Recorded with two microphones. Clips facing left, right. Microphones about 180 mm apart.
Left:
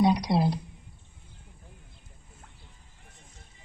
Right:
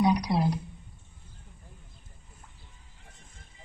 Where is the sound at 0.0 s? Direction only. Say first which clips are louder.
Left 1 dB; 30° left (ahead or behind).